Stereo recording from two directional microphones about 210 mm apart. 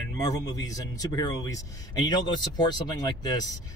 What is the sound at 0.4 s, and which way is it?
A man's voice, 15° left (ahead or behind).